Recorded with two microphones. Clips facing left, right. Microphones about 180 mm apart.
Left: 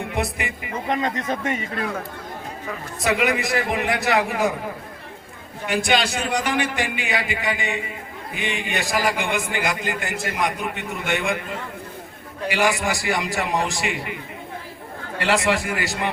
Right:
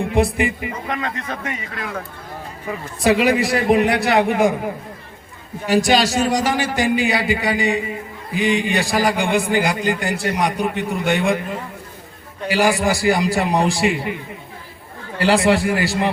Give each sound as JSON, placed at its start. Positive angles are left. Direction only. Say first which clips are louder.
{"t": 0.0, "sound": "speech", "louder": "right 8 dB", "side_deg": -30}
{"t": 0.9, "sound": "speech", "louder": "left 4 dB", "side_deg": 20}
{"t": 3.0, "sound": "a man's voice", "louder": "right 6 dB", "side_deg": -30}
{"t": 5.6, "sound": "a man's voice", "louder": "right 5 dB", "side_deg": -35}
{"t": 12.5, "sound": "a man's voice", "louder": "right 4 dB", "side_deg": -35}
{"t": 15.2, "sound": "a man's voice", "louder": "right 6 dB", "side_deg": -30}